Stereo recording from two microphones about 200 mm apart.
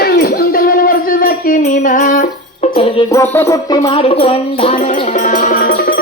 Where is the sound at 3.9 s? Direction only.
30° left (ahead or behind).